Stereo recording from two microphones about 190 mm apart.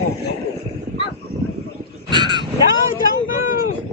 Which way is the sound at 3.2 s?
45° left (ahead or behind).